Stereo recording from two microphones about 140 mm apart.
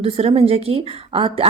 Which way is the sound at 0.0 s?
45° right (ahead or behind).